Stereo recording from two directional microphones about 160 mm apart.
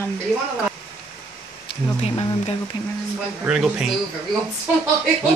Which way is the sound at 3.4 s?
5° right (ahead or behind).